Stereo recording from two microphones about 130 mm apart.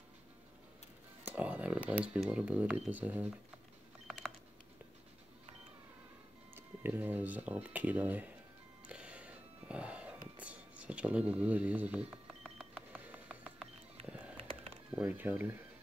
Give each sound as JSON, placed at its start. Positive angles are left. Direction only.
{"t": 1.2, "sound": "speech", "side_deg": -10}
{"t": 6.5, "sound": "speech", "side_deg": -15}
{"t": 8.8, "sound": "music", "side_deg": -10}
{"t": 12.7, "sound": "a sound", "side_deg": -10}
{"t": 14.0, "sound": "music", "side_deg": -10}
{"t": 15.0, "sound": "speech", "side_deg": -15}